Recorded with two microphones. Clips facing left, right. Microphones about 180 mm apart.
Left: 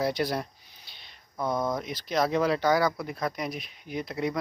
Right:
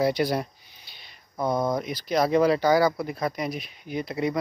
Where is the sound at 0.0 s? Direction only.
Centre (ahead or behind).